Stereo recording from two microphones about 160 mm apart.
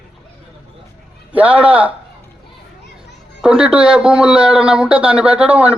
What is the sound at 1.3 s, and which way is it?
Speech, 10° right (ahead or behind).